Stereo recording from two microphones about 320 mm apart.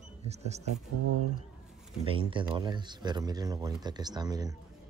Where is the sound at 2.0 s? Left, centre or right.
Centre.